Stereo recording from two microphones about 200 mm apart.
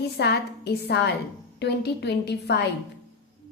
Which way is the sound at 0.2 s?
55° left (ahead or behind).